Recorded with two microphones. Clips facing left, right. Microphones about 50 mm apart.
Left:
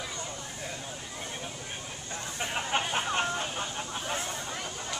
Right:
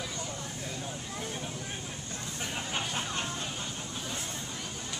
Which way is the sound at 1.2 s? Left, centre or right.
Centre.